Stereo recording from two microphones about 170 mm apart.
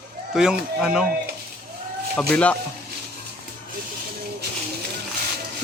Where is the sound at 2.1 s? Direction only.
5° left (ahead or behind).